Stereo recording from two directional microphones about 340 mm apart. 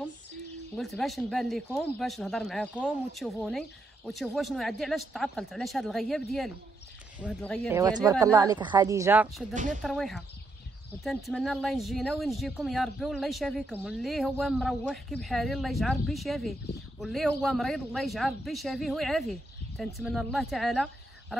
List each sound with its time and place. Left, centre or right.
0.7 s speech: centre
7.7 s speech: centre
9.5 s speech: right
9.8 s speech: centre